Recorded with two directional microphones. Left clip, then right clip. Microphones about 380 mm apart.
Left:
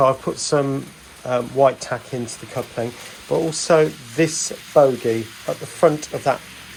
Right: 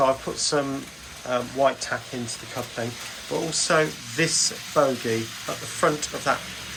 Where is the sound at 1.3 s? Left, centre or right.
Centre.